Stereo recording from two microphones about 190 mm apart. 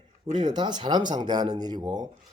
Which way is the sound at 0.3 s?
25° right (ahead or behind).